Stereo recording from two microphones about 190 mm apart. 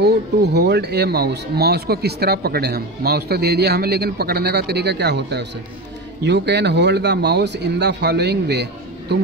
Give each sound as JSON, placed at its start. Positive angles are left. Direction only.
{"t": 0.0, "sound": "speech", "side_deg": -60}